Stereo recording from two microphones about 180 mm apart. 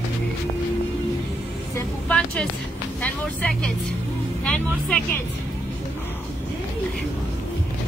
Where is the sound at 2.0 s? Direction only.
5° left (ahead or behind).